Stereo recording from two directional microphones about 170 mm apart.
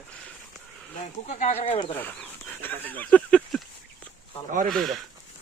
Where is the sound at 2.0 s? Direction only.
10° left (ahead or behind).